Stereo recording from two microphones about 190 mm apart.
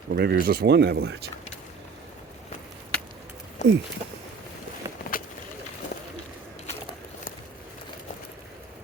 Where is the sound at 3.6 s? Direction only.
40° left (ahead or behind).